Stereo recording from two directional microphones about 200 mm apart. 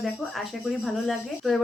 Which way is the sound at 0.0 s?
Centre (ahead or behind).